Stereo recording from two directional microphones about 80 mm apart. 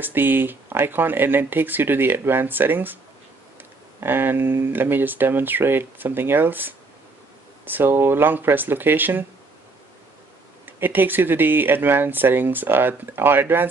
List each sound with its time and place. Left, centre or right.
0.0 s speech: right
4.0 s speech: right
10.6 s speech: right